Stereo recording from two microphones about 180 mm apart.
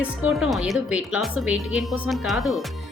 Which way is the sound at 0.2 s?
Centre (ahead or behind).